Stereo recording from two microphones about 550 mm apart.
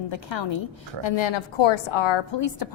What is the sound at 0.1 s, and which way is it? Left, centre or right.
A woman's voice, left.